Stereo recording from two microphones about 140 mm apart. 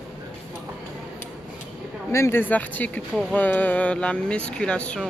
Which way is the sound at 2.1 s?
15° left (ahead or behind).